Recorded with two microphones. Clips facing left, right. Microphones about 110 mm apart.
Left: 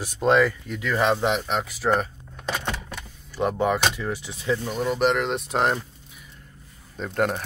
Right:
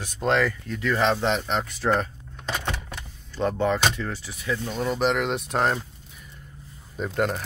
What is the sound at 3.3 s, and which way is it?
Speech, 10° left (ahead or behind).